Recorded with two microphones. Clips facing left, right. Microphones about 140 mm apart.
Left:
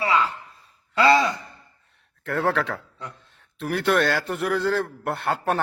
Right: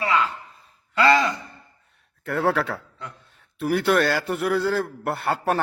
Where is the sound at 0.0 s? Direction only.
10° left (ahead or behind).